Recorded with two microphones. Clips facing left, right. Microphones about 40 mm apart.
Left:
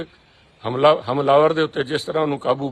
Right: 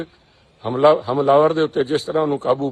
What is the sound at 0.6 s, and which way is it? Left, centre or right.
A man's voice, left.